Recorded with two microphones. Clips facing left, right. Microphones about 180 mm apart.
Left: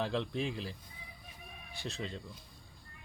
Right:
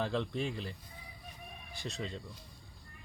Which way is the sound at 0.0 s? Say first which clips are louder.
Even; centre (ahead or behind).